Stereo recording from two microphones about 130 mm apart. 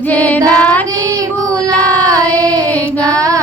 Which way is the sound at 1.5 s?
25° right (ahead or behind).